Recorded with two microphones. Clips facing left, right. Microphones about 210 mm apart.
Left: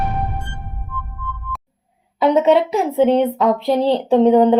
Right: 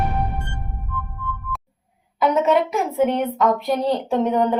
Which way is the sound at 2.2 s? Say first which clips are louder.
Left 4 dB; 25° left (ahead or behind).